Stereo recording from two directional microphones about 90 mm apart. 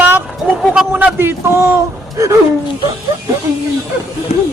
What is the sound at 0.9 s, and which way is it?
A man's voice, 20° right (ahead or behind).